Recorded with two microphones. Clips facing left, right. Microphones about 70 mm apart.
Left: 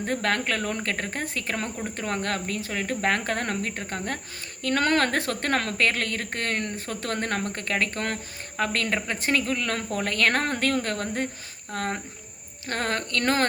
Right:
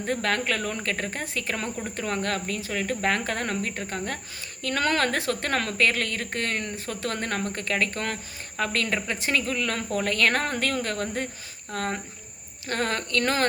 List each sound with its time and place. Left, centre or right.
0.0 s speech: left